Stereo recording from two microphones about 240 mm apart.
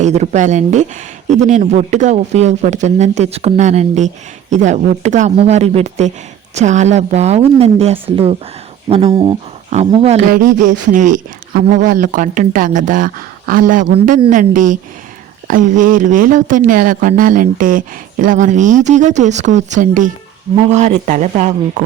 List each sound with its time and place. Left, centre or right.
0.0 s speech: right